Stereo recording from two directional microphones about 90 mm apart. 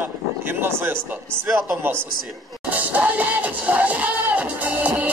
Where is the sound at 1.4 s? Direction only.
25° right (ahead or behind).